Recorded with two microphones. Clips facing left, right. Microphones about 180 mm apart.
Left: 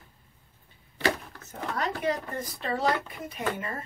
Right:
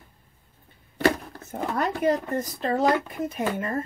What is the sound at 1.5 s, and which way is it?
Speech, 45° right (ahead or behind).